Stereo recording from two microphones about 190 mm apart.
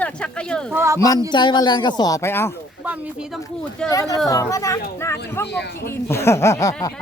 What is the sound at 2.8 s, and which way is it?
Speech, 5° right (ahead or behind).